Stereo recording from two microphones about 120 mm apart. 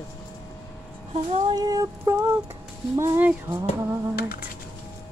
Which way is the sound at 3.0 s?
20° right (ahead or behind).